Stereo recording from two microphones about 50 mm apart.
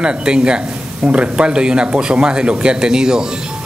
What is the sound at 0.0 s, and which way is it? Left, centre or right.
Speech, centre.